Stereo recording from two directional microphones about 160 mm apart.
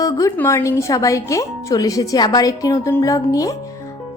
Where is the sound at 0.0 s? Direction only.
20° left (ahead or behind).